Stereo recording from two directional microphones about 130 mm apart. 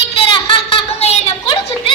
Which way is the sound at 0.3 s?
45° left (ahead or behind).